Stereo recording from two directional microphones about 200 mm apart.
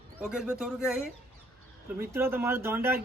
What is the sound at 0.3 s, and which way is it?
A man's voice, 5° right (ahead or behind).